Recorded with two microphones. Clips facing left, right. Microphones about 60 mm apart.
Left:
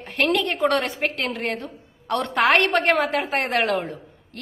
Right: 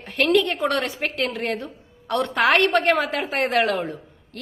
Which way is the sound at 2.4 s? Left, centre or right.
Left.